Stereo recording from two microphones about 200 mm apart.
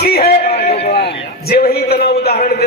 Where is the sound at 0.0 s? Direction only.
50° left (ahead or behind).